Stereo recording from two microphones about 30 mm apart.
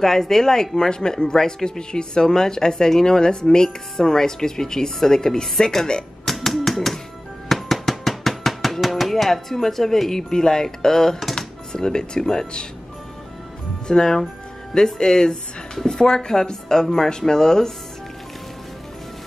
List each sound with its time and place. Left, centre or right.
0.0 s speech: centre
6.4 s typewriter: centre
7.4 s a sound: centre
8.8 s music: centre
9.1 s speech: centre
10.3 s speech: left
13.8 s speech: left